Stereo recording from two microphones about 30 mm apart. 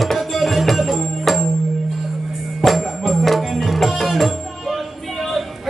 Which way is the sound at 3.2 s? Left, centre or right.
Centre.